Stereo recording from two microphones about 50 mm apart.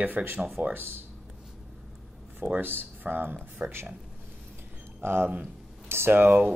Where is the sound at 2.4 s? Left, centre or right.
Right.